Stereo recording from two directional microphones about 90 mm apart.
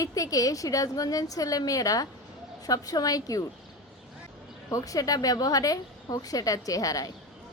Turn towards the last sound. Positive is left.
turn(degrees=40)  # may be behind; listen again after turning